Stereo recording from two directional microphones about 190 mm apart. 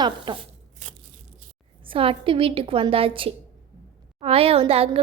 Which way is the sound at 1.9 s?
30° right (ahead or behind).